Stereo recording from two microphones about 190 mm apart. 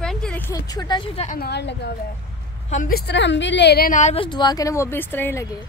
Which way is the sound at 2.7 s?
45° left (ahead or behind).